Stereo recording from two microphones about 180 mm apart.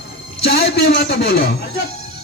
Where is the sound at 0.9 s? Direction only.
65° left (ahead or behind).